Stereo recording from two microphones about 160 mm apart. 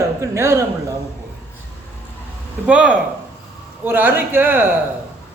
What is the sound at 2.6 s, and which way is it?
A man's voice, 5° right (ahead or behind).